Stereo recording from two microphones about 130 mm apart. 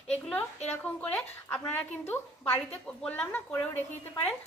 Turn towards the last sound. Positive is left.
turn(degrees=15)  # may be behind; listen again after turning